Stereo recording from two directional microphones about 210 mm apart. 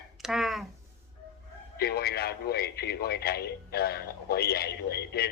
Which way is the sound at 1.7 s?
50° left (ahead or behind).